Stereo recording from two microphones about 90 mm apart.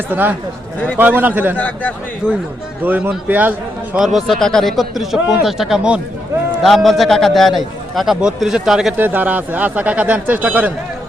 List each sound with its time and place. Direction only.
0.1 s speech: 20° right (ahead or behind)
1.5 s a man's voice: 15° left (ahead or behind)
2.2 s speech: 10° right (ahead or behind)
3.9 s a man's voice: centre (ahead or behind)
9.0 s speech: 20° right (ahead or behind)